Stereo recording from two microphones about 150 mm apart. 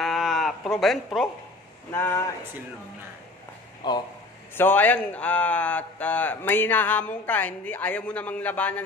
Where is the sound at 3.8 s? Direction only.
30° left (ahead or behind).